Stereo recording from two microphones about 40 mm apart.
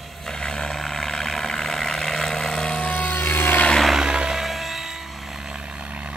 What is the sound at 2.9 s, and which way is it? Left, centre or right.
Vehicle, left.